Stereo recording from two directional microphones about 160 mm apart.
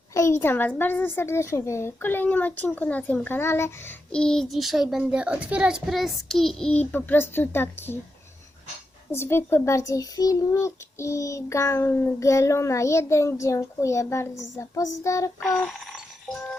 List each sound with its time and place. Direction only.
0.1 s a woman's voice: 20° left (ahead or behind)
9.1 s a child's voice: 15° left (ahead or behind)
15.4 s a sound: centre (ahead or behind)